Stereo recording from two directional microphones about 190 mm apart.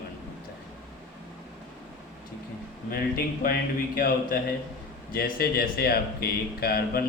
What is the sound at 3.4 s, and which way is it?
Speech, 50° left (ahead or behind).